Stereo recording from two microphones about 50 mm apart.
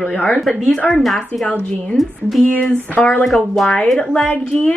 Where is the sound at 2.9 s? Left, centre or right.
Left.